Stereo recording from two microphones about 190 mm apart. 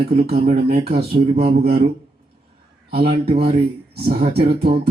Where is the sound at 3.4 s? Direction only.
55° right (ahead or behind).